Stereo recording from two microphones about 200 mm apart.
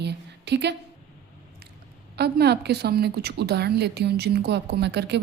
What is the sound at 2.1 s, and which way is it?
A woman's voice, 55° right (ahead or behind).